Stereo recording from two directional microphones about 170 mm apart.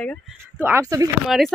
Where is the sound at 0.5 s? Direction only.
15° right (ahead or behind).